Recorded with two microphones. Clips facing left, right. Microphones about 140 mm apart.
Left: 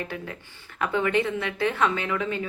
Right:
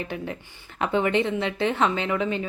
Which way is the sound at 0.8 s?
25° right (ahead or behind).